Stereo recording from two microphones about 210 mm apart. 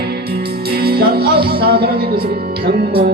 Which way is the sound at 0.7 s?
45° right (ahead or behind).